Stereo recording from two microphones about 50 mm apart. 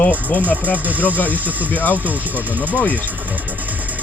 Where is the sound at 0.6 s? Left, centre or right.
Right.